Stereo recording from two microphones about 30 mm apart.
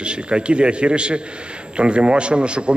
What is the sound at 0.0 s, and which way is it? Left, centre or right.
A man's voice, right.